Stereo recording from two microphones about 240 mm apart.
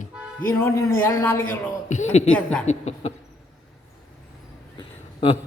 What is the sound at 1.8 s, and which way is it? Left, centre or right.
Speech, left.